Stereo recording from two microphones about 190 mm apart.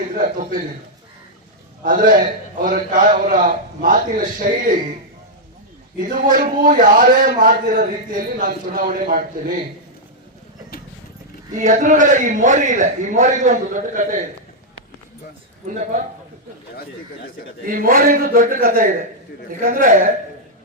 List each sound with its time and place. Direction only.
0.1 s a man's voice: 45° right (ahead or behind)
1.8 s a man's voice: 45° right (ahead or behind)
6.3 s a man's voice: 45° right (ahead or behind)
11.5 s a man's voice: 40° right (ahead or behind)
15.6 s a man's voice: 45° right (ahead or behind)
17.7 s a man's voice: 50° right (ahead or behind)